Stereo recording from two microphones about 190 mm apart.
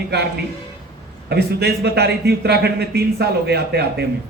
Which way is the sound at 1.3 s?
60° right (ahead or behind).